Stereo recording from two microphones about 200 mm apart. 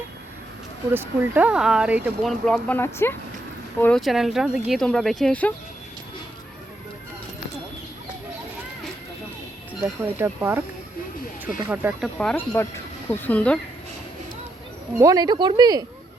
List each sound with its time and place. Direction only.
0.9 s speech: 10° right (ahead or behind)
2.5 s speech: 10° left (ahead or behind)
9.8 s speech: 10° right (ahead or behind); by 13.6 s 5° left (ahead or behind)
14.9 s speech: 20° right (ahead or behind)